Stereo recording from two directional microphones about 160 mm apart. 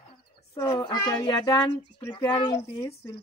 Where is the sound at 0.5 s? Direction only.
20° left (ahead or behind).